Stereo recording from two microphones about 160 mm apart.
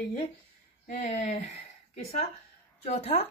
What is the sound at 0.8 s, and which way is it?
Speech, 50° left (ahead or behind).